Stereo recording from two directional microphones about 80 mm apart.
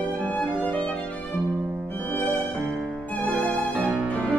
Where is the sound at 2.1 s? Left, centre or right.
Left.